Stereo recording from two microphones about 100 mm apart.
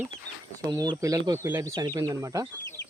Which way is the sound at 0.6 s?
45° right (ahead or behind).